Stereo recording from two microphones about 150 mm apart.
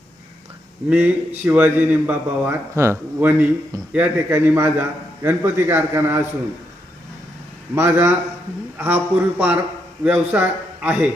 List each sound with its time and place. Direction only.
0.9 s a man's voice: 10° right (ahead or behind)
7.8 s a man's voice: 15° right (ahead or behind)